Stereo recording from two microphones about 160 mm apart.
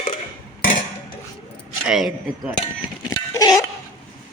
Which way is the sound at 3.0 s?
20° left (ahead or behind).